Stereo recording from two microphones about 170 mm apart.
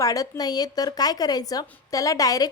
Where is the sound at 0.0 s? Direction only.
20° left (ahead or behind).